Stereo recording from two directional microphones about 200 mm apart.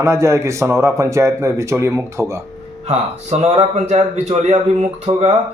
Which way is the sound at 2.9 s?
30° right (ahead or behind).